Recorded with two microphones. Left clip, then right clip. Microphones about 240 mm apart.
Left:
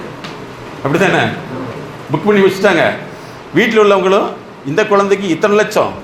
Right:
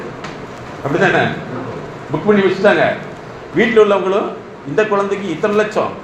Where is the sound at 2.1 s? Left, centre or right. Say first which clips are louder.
Left 3 dB; left.